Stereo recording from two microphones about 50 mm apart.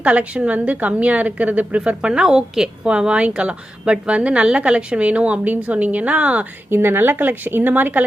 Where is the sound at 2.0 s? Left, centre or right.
Centre.